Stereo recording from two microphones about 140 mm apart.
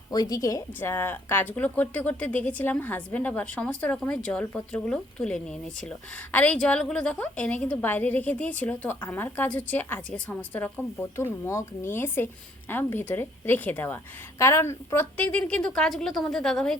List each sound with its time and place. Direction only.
0.1 s a woman's voice: 25° left (ahead or behind); by 16.7 s 5° left (ahead or behind)